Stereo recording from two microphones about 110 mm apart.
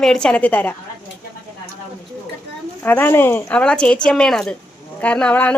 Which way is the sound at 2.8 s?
15° left (ahead or behind).